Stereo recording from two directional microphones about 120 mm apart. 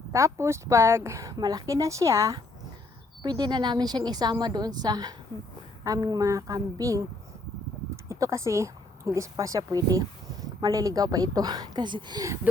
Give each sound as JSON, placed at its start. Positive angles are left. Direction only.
{"t": 0.1, "sound": "speech", "side_deg": -25}
{"t": 3.2, "sound": "a woman's voice", "side_deg": -35}
{"t": 8.1, "sound": "a woman's voice", "side_deg": -25}